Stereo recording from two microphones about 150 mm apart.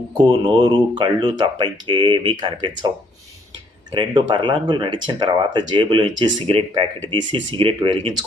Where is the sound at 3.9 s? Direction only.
35° right (ahead or behind).